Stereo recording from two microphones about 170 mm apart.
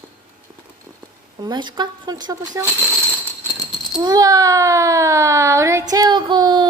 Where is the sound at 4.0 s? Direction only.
20° right (ahead or behind).